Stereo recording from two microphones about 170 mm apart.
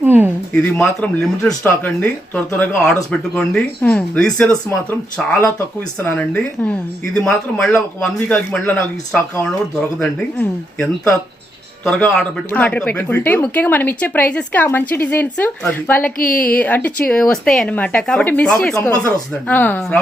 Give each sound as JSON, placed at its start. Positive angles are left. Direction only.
{"t": 0.0, "sound": "a sound", "side_deg": -10}
{"t": 0.5, "sound": "speech", "side_deg": 5}
{"t": 11.9, "sound": "speech", "side_deg": 5}
{"t": 18.9, "sound": "speech", "side_deg": 20}
{"t": 19.5, "sound": "speech", "side_deg": 10}